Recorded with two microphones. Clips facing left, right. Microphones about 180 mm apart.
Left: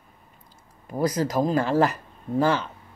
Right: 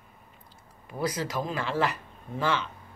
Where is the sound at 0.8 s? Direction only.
40° left (ahead or behind).